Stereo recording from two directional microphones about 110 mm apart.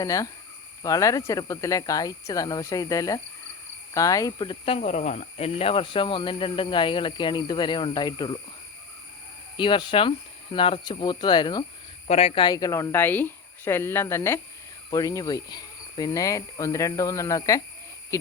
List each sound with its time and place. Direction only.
0.0 s speech: 30° left (ahead or behind)
4.6 s speech: 70° left (ahead or behind); by 8.4 s 45° left (ahead or behind)
9.6 s speech: 45° left (ahead or behind)
12.0 s speech: 65° left (ahead or behind)
12.5 s speech: 35° left (ahead or behind)